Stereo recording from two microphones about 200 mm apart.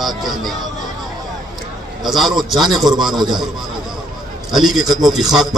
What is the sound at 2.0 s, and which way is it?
Speech, centre (ahead or behind).